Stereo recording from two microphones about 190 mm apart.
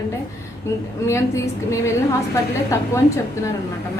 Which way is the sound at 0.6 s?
15° left (ahead or behind).